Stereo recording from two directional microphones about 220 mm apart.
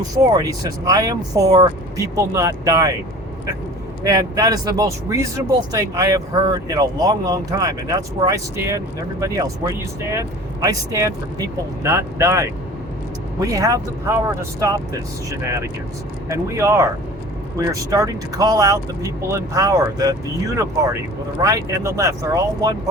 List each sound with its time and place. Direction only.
0.3 s speech: 15° right (ahead or behind)
4.0 s speech: 15° right (ahead or behind)
15.3 s speech: 15° right (ahead or behind)